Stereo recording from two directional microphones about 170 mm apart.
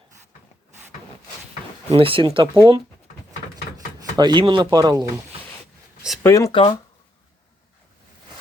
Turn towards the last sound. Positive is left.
turn(degrees=30)  # may be behind; listen again after turning